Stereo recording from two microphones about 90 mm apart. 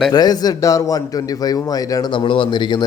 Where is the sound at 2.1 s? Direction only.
70° left (ahead or behind).